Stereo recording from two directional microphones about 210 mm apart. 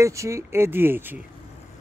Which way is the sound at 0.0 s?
15° right (ahead or behind).